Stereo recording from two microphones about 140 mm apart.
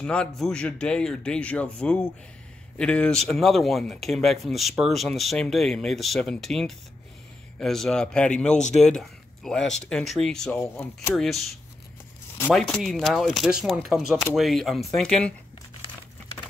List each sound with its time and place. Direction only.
0.0 s speech: 5° left (ahead or behind)
10.6 s speech: 20° left (ahead or behind)
11.1 s speech: centre (ahead or behind)
12.5 s speech: 5° left (ahead or behind)